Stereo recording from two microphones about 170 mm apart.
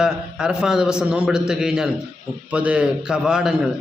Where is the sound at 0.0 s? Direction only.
5° right (ahead or behind).